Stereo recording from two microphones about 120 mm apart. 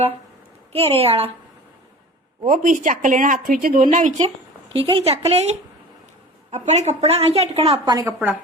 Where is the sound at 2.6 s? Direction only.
90° right.